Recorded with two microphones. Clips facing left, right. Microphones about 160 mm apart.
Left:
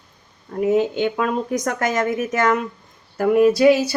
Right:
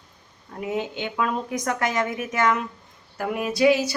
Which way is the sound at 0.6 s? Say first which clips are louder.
Left 10 dB; 40° left (ahead or behind).